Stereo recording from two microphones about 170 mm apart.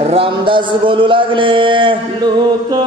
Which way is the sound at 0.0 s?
35° right (ahead or behind).